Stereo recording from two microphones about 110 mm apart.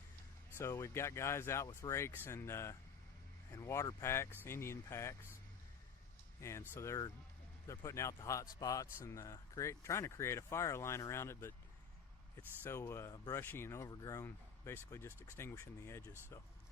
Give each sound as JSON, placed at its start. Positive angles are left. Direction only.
{"t": 0.6, "sound": "speech", "side_deg": 25}
{"t": 6.4, "sound": "speech", "side_deg": 25}